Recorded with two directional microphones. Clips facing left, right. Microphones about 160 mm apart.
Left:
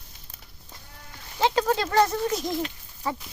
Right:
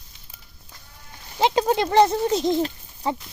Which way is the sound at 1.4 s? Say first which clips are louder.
Right 3 dB; 20° right (ahead or behind).